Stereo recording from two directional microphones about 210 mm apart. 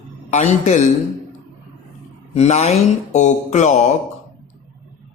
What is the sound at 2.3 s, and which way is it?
Music, 30° left (ahead or behind).